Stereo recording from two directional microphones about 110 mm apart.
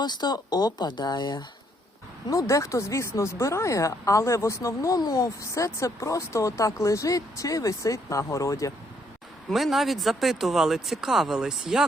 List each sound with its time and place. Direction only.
0.0 s speech: 40° left (ahead or behind)
2.3 s speech: 30° left (ahead or behind)
9.5 s speech: centre (ahead or behind)